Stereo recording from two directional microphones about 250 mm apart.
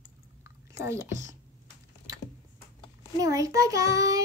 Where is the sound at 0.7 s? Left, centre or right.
Centre.